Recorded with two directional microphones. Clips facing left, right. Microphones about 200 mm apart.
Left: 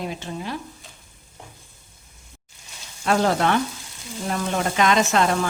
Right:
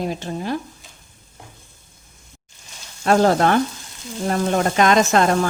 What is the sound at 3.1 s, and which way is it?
Speech, 45° right (ahead or behind).